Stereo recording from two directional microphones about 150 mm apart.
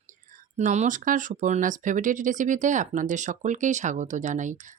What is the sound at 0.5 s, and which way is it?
Speech, 55° right (ahead or behind).